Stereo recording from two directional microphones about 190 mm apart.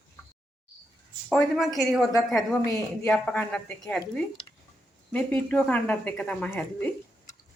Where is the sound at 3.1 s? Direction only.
5° left (ahead or behind).